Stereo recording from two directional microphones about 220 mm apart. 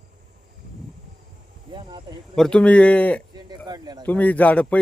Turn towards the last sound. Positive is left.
turn(degrees=5)  # may be behind; listen again after turning